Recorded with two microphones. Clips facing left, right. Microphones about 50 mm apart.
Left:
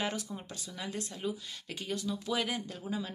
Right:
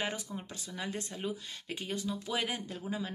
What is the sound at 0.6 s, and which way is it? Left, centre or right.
Speech, right.